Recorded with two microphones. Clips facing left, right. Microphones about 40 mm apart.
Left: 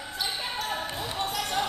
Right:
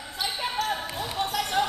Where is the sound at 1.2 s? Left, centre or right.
Centre.